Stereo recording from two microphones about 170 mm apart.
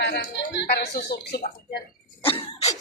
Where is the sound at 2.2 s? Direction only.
35° left (ahead or behind).